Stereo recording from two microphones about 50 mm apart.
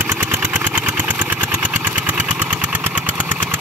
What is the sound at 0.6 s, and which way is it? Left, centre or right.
Vehicle, right.